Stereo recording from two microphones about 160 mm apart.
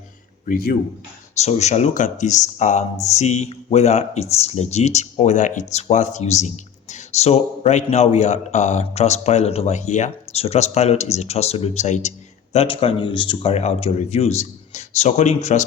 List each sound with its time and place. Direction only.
0.4 s speech: 70° left (ahead or behind)
1.4 s speech: 45° left (ahead or behind)